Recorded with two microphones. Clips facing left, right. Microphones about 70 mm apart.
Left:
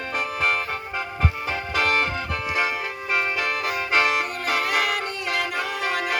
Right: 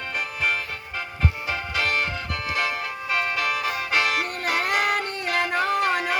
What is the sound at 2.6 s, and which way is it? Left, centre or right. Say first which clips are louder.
Music: left 1 dB; left.